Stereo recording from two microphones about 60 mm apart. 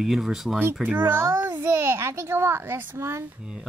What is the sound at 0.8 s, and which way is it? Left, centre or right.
A child's voice, right.